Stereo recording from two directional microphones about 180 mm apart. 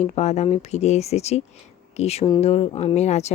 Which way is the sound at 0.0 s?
40° left (ahead or behind).